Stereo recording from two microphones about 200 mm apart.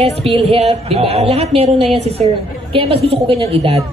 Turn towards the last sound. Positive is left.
turn(degrees=-30)  # may be behind; listen again after turning